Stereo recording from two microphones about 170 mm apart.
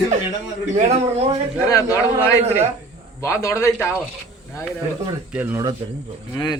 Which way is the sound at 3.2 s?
15° left (ahead or behind).